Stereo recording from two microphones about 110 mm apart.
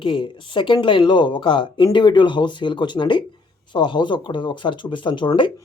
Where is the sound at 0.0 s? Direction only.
45° left (ahead or behind).